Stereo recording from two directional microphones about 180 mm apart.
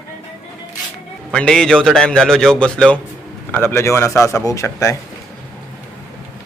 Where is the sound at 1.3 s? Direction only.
5° left (ahead or behind).